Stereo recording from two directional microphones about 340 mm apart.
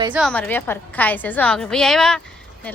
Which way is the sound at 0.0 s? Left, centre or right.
Centre.